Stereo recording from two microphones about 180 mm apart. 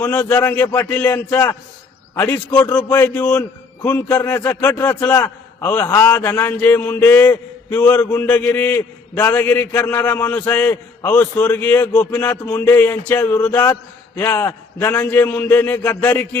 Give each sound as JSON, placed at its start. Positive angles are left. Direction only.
{"t": 0.0, "sound": "a man's voice", "side_deg": 10}